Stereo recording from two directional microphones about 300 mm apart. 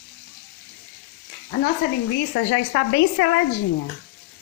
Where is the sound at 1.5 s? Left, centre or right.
Left.